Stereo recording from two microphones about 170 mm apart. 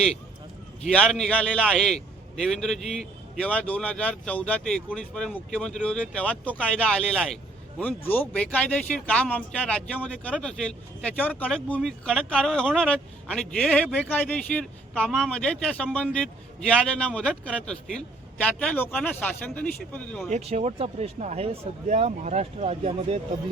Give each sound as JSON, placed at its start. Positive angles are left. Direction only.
{"t": 0.9, "sound": "a man's voice", "side_deg": 5}
{"t": 20.3, "sound": "speech", "side_deg": -35}